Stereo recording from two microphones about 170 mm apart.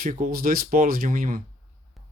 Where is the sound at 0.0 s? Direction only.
55° right (ahead or behind).